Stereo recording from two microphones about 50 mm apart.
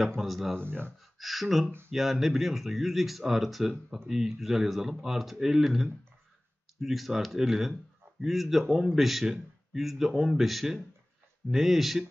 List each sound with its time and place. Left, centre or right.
0.2 s speech: centre
0.6 s speech: right
1.1 s speech: centre